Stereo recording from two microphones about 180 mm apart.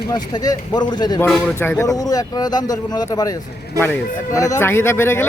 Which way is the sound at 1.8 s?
20° left (ahead or behind).